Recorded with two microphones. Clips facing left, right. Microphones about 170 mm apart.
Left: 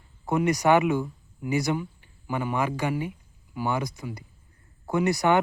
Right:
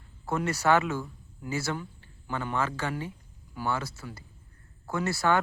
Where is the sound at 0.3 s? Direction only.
15° left (ahead or behind).